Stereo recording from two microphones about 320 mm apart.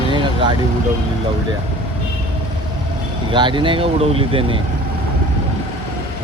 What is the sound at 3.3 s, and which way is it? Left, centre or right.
Speech, centre.